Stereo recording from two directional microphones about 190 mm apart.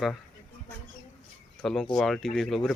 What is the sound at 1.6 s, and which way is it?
Speech, centre (ahead or behind).